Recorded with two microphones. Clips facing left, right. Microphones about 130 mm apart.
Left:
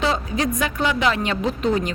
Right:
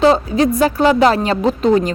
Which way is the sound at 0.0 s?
35° right (ahead or behind).